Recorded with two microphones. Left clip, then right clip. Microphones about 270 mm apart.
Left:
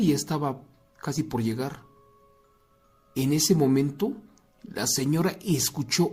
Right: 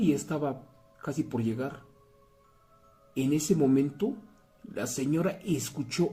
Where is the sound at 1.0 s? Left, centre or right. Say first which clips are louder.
Left 3 dB; left.